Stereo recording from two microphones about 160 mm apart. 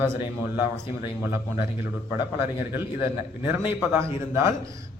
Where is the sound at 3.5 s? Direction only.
15° right (ahead or behind).